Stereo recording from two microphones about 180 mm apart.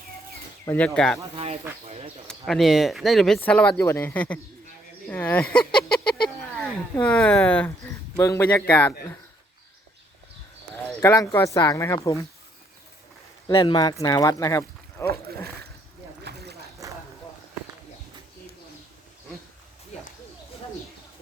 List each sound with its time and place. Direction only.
0.6 s speech: 15° left (ahead or behind)
1.8 s speech: 35° right (ahead or behind)
2.2 s speech: centre (ahead or behind)
5.0 s a sound: 10° left (ahead or behind)
7.0 s speech: 5° left (ahead or behind)
11.0 s speech: 20° left (ahead or behind)
13.5 s speech: 25° left (ahead or behind)
16.8 s vehicle: 20° right (ahead or behind)